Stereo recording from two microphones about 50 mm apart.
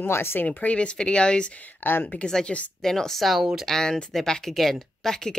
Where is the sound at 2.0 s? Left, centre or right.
Centre.